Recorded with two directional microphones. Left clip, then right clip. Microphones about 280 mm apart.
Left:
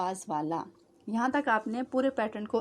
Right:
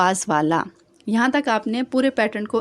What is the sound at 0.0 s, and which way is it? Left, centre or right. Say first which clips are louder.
Speech: right 13 dB; right.